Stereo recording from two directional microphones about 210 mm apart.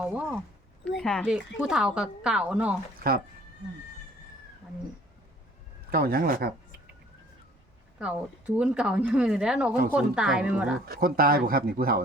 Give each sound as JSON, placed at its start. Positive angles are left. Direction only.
{"t": 0.0, "sound": "speech", "side_deg": -5}
{"t": 5.9, "sound": "speech", "side_deg": -45}
{"t": 7.9, "sound": "speech", "side_deg": -5}
{"t": 10.8, "sound": "speech", "side_deg": -45}